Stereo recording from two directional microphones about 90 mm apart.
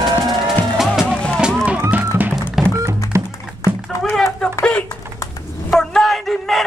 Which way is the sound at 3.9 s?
35° left (ahead or behind).